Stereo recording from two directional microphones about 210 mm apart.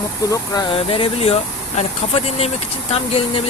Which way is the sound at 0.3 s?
20° left (ahead or behind).